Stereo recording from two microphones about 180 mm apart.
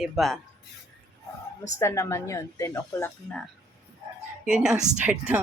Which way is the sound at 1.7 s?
15° left (ahead or behind).